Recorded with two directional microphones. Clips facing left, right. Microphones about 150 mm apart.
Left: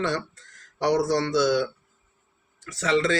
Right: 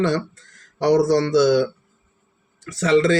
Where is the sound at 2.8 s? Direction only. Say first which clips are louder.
Right 6 dB; 40° right (ahead or behind).